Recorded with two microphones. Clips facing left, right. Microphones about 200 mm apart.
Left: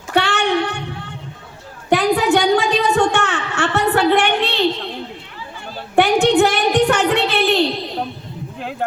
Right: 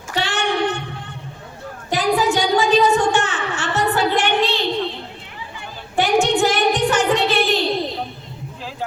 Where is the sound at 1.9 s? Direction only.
60° left (ahead or behind).